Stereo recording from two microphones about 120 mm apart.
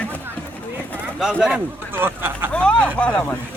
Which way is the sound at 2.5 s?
10° left (ahead or behind).